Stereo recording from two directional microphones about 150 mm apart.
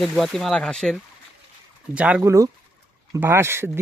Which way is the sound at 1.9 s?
10° right (ahead or behind).